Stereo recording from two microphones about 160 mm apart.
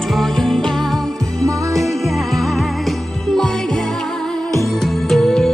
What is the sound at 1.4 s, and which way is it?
Music, 20° right (ahead or behind).